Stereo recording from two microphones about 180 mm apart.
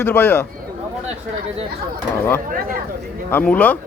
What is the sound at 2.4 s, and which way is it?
Speech, 50° right (ahead or behind).